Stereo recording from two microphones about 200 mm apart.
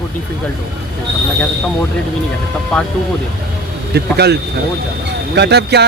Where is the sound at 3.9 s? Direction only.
55° right (ahead or behind).